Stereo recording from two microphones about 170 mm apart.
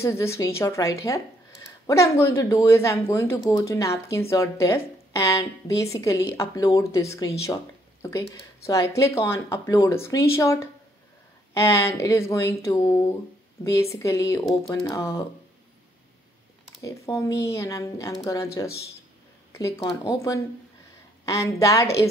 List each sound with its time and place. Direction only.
0.2 s speech: 15° left (ahead or behind)
16.8 s speech: 15° left (ahead or behind)